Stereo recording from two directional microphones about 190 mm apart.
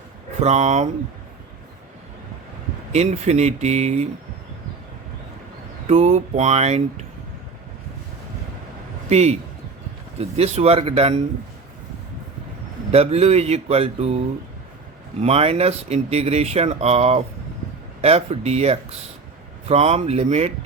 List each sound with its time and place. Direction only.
0.4 s speech: 35° right (ahead or behind)
2.9 s speech: 35° right (ahead or behind)
5.9 s speech: 35° right (ahead or behind)
9.0 s a man's voice: 35° right (ahead or behind)
12.9 s speech: 35° right (ahead or behind)
15.2 s speech: 35° right (ahead or behind)